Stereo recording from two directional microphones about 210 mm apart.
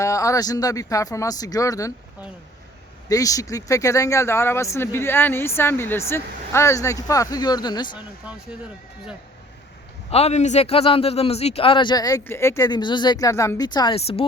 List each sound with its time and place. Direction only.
0.0 s speech: 15° left (ahead or behind)
3.1 s speech: 15° left (ahead or behind)
10.1 s speech: 30° left (ahead or behind)